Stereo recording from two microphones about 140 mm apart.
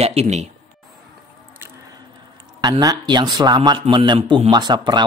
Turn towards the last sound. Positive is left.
turn(degrees=-30)  # may be behind; listen again after turning